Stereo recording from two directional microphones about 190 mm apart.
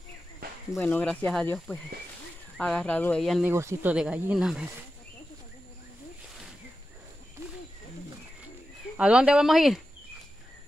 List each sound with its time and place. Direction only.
0.4 s cricket: 50° right (ahead or behind)
0.7 s speech: 10° left (ahead or behind)
3.4 s speech: 10° right (ahead or behind)
8.9 s speech: 5° right (ahead or behind)